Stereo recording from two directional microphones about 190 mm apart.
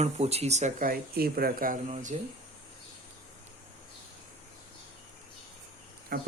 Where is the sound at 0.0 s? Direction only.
35° right (ahead or behind).